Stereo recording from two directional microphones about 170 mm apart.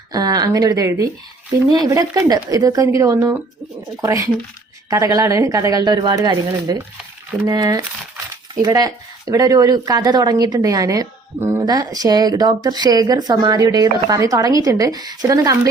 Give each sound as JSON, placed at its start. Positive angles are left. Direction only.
{"t": 0.1, "sound": "speech", "side_deg": -20}